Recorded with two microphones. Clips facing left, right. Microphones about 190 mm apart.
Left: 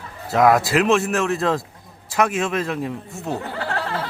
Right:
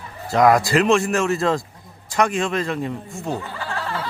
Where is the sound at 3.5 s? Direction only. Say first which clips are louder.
Left 3 dB; 65° left (ahead or behind).